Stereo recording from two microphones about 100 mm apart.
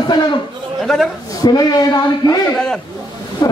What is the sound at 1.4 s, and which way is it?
A man's voice, 45° left (ahead or behind).